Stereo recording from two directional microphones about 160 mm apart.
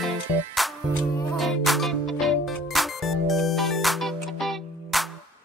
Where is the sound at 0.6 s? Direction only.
Centre (ahead or behind).